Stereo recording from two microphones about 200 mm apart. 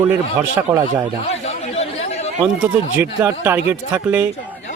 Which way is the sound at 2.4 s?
10° right (ahead or behind).